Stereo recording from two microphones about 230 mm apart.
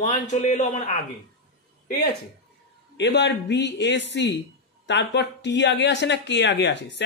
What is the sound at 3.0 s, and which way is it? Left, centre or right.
Speech, left.